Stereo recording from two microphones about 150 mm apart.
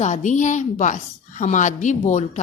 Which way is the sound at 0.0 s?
55° left (ahead or behind).